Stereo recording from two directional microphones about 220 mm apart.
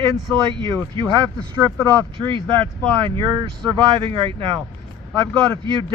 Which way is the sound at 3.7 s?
20° right (ahead or behind).